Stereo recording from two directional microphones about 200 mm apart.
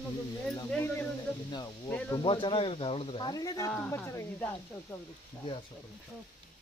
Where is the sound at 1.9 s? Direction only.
10° left (ahead or behind).